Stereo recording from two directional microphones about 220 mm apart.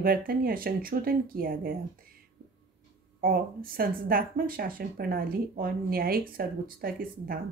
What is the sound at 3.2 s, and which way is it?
Speech, 40° right (ahead or behind).